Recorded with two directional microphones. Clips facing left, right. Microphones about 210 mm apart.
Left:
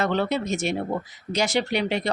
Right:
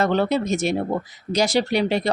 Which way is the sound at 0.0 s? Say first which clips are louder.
Right 4 dB; 40° right (ahead or behind).